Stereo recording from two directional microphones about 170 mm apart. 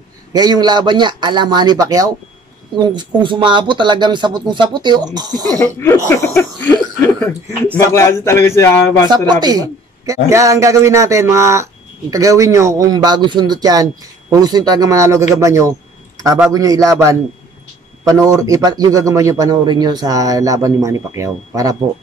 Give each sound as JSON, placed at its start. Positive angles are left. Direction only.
{"t": 0.3, "sound": "speech", "side_deg": -25}
{"t": 5.6, "sound": "speech", "side_deg": 15}
{"t": 9.3, "sound": "a man's voice", "side_deg": -25}